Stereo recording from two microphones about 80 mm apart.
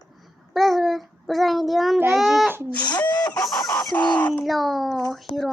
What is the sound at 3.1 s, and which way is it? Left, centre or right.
Chicken, left.